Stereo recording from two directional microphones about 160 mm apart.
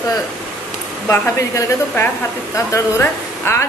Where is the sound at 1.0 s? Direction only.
15° left (ahead or behind).